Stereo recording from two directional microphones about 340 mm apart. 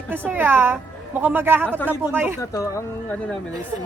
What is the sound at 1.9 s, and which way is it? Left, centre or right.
Speech, centre.